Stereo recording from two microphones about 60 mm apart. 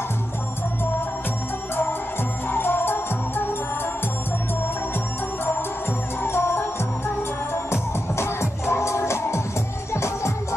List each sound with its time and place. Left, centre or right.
2.5 s music: left
6.2 s music: left
7.7 s music: left